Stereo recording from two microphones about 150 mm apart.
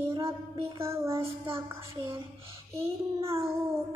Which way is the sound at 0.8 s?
15° right (ahead or behind).